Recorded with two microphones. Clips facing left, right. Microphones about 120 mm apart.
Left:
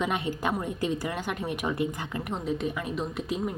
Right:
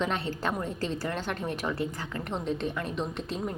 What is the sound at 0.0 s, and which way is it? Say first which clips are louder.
A woman's voice: left 1 dB; 10° left (ahead or behind).